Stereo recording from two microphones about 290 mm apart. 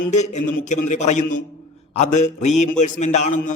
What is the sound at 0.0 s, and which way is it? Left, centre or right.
A man's voice, left.